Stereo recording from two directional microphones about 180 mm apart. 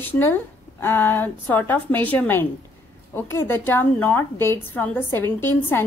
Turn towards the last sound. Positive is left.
turn(degrees=10)  # may be behind; listen again after turning